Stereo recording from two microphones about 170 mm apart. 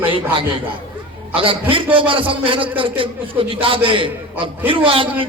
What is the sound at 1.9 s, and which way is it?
A man's voice, 30° right (ahead or behind).